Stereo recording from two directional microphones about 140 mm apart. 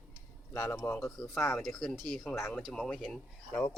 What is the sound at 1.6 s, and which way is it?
Speech, centre (ahead or behind).